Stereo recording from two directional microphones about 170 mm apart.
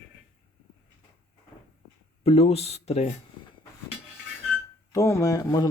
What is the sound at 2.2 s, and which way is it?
Speech, 35° left (ahead or behind).